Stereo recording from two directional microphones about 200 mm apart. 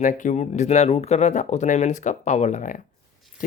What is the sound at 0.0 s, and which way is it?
Speech, 40° left (ahead or behind).